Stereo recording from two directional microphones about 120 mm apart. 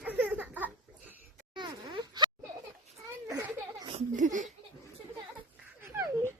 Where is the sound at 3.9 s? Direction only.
80° right.